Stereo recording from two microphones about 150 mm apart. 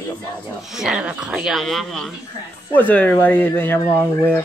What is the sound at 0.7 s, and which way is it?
Speech, 5° right (ahead or behind).